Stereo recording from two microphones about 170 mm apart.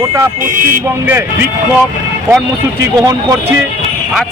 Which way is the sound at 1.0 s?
15° right (ahead or behind).